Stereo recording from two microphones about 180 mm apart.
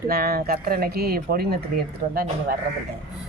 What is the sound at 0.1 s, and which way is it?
Speech, 55° right (ahead or behind).